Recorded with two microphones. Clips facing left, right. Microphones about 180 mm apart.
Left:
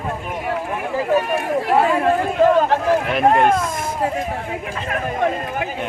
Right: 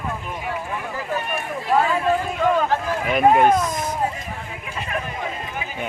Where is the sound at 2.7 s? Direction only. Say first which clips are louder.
Left 5 dB; 65° left (ahead or behind).